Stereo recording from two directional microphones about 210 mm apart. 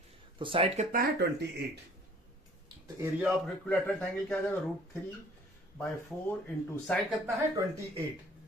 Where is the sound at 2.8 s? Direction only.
15° right (ahead or behind).